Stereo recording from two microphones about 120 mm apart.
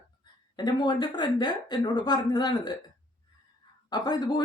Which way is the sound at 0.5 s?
35° left (ahead or behind).